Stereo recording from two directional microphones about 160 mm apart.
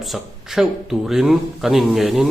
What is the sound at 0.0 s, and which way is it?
A man's voice, centre (ahead or behind).